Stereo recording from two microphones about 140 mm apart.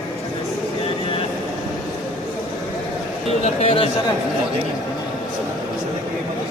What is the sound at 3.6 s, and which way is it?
Speech, 45° left (ahead or behind).